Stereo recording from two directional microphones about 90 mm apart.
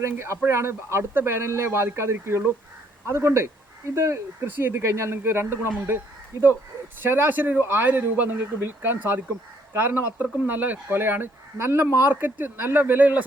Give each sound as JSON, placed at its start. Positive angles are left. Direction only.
{"t": 0.0, "sound": "speech", "side_deg": -30}
{"t": 7.0, "sound": "speech", "side_deg": -25}